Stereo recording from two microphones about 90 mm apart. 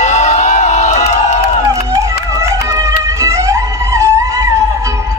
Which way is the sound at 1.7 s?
35° right (ahead or behind).